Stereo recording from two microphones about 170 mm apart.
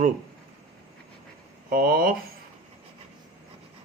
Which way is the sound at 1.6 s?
55° right (ahead or behind).